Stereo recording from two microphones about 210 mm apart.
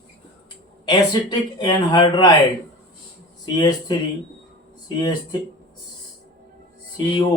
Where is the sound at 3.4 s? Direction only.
20° left (ahead or behind).